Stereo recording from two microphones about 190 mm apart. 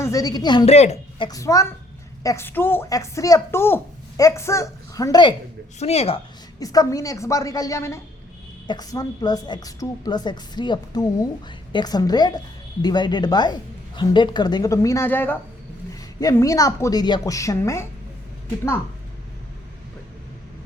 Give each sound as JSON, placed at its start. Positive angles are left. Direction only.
{"t": 0.0, "sound": "a woman's voice", "side_deg": 15}
{"t": 1.3, "sound": "a woman's voice", "side_deg": 15}
{"t": 5.8, "sound": "speech", "side_deg": 35}
{"t": 6.6, "sound": "a woman's voice", "side_deg": 20}